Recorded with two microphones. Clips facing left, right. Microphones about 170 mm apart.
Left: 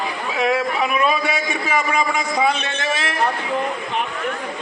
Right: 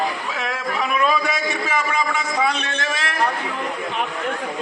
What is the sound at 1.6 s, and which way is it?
A man's voice, 10° left (ahead or behind).